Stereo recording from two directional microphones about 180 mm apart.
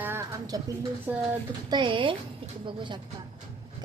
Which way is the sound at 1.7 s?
25° right (ahead or behind).